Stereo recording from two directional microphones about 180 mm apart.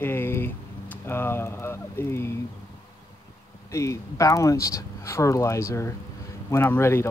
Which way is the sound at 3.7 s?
15° left (ahead or behind).